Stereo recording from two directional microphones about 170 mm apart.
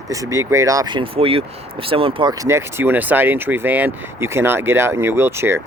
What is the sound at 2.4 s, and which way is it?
Speech, 15° right (ahead or behind).